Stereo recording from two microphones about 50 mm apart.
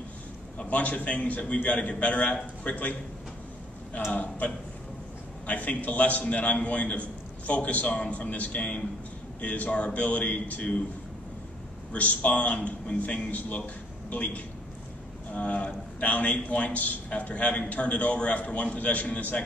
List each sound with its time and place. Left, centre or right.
0.6 s a man's voice: left
4.1 s a man's voice: left
5.5 s a man's voice: left
11.9 s a man's voice: left